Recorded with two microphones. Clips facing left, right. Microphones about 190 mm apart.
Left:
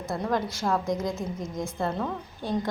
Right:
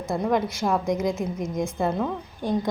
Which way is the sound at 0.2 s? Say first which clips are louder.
Right 4 dB; 20° right (ahead or behind).